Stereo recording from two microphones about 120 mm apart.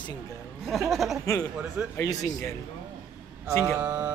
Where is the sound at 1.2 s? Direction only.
25° left (ahead or behind).